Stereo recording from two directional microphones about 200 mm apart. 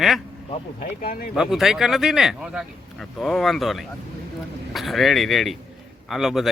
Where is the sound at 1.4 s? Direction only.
Centre (ahead or behind).